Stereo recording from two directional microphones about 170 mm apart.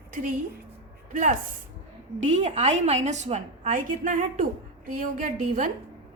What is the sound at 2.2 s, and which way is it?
A woman's voice, 45° right (ahead or behind).